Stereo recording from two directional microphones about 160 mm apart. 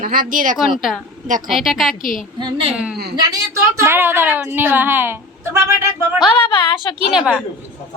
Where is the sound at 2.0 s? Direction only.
60° left (ahead or behind).